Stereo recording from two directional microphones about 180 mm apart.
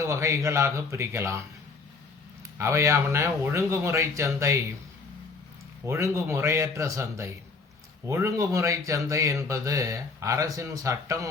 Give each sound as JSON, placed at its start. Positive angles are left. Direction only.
{"t": 0.0, "sound": "speech", "side_deg": -15}
{"t": 2.6, "sound": "speech", "side_deg": -15}
{"t": 5.8, "sound": "speech", "side_deg": -15}